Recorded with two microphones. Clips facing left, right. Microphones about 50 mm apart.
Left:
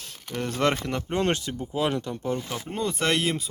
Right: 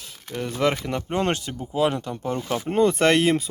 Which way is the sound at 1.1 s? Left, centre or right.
Right.